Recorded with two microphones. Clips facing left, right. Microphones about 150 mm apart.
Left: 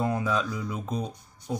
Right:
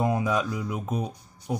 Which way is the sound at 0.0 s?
15° right (ahead or behind).